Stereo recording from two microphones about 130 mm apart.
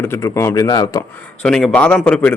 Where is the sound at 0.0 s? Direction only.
20° left (ahead or behind).